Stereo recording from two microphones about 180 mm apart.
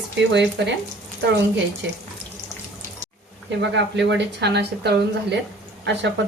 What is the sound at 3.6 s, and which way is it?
Speech, 75° right (ahead or behind).